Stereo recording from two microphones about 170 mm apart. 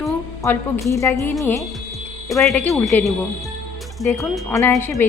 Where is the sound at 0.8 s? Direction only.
15° left (ahead or behind).